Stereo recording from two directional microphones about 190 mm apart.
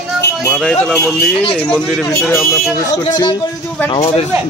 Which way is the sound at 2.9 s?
20° left (ahead or behind).